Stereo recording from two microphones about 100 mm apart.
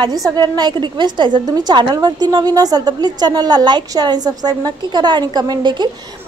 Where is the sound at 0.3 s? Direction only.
45° right (ahead or behind).